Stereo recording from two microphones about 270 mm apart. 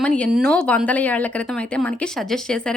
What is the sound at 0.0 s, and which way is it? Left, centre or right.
A woman's voice, centre.